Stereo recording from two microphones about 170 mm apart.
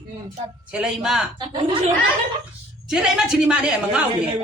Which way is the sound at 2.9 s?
5° right (ahead or behind).